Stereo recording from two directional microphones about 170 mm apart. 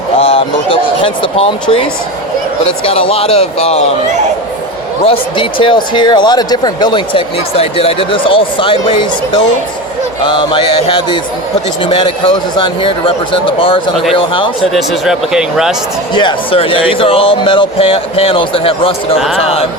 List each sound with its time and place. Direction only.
0.2 s a sound: 35° left (ahead or behind)
2.6 s speech: 35° left (ahead or behind)
5.4 s speech: 30° left (ahead or behind)
14.7 s speech: centre (ahead or behind)
16.1 s speech: 30° left (ahead or behind)